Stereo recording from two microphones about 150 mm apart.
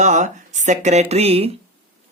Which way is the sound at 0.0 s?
55° right (ahead or behind).